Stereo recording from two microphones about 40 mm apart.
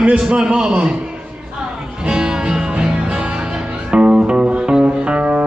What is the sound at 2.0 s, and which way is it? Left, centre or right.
Music, right.